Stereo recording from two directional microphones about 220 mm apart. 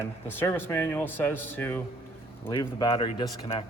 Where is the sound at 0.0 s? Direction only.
10° left (ahead or behind).